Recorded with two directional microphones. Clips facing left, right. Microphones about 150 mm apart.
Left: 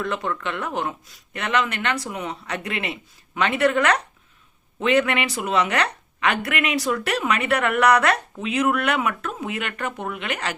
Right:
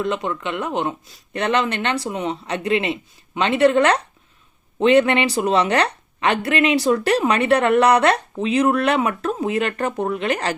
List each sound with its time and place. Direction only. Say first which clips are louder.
0.0 s a woman's voice: right 3 dB; 20° right (ahead or behind)